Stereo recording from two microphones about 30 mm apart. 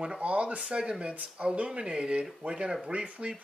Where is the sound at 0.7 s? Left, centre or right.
Right.